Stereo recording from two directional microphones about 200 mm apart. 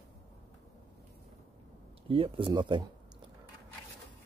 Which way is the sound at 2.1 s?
25° right (ahead or behind).